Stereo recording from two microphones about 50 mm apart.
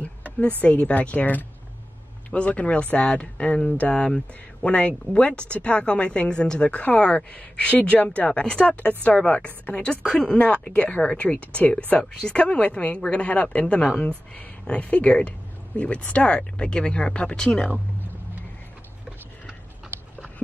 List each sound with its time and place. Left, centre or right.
0.4 s speech: left
3.6 s speech: left
7.7 s speech: left
12.0 s speech: centre
12.4 s speech: left
13.7 s speech: centre
14.0 s speech: left